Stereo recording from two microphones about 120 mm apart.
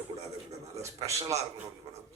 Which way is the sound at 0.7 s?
25° right (ahead or behind).